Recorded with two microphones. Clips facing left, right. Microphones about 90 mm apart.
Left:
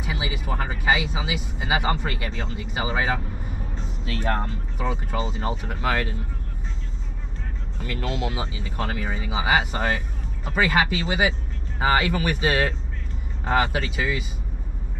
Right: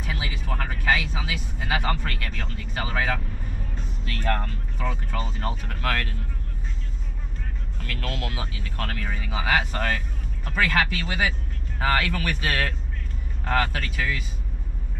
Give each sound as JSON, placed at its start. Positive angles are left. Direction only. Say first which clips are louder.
{"t": 0.0, "sound": "speech", "louder": "left 3 dB", "side_deg": 10}
{"t": 7.8, "sound": "speech", "louder": "left 4 dB", "side_deg": 10}